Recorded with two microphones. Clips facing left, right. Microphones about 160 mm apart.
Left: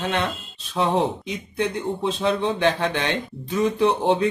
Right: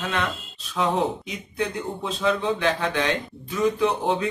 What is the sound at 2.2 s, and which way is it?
Speech, 30° left (ahead or behind).